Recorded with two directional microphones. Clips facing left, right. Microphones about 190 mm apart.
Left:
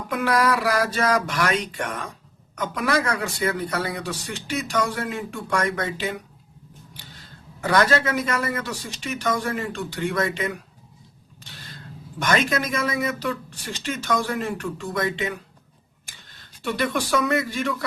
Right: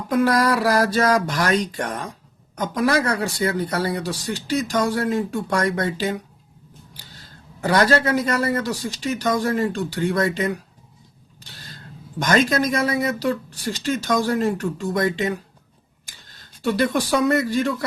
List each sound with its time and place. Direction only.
0.1 s speech: 40° right (ahead or behind)
11.4 s vehicle: 40° right (ahead or behind)
12.2 s speech: 35° right (ahead or behind)
16.9 s speech: 40° right (ahead or behind)